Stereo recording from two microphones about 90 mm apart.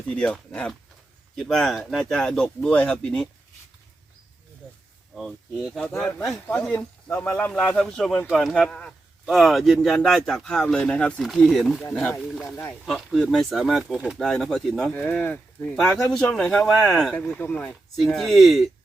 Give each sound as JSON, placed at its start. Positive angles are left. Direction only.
{"t": 0.1, "sound": "speech", "side_deg": 10}
{"t": 6.7, "sound": "speech", "side_deg": 20}
{"t": 11.2, "sound": "speech", "side_deg": 0}
{"t": 14.9, "sound": "speech", "side_deg": 20}
{"t": 17.2, "sound": "speech", "side_deg": 20}
{"t": 17.9, "sound": "speech", "side_deg": 0}